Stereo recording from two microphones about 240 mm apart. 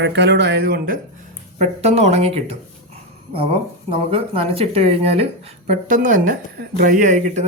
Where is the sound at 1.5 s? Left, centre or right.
Right.